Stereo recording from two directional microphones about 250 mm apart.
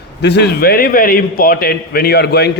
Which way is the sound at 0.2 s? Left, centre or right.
Left.